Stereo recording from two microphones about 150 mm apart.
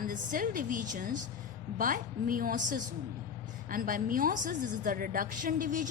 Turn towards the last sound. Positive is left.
turn(degrees=-60)  # may be behind; listen again after turning